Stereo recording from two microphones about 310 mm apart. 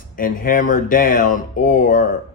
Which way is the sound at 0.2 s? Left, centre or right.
Left.